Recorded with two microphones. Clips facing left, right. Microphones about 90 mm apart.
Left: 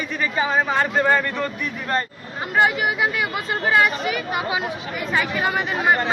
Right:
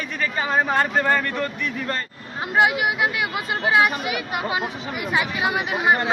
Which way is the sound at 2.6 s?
10° right (ahead or behind).